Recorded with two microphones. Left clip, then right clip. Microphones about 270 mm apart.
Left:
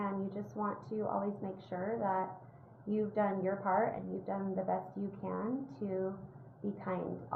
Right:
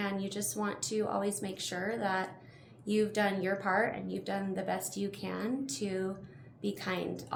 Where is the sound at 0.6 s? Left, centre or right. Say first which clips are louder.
Right 3 dB; right.